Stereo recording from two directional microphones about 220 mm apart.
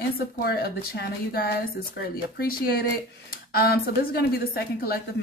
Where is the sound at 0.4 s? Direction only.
45° left (ahead or behind).